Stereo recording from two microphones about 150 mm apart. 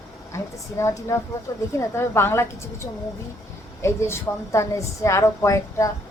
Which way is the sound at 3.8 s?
20° left (ahead or behind).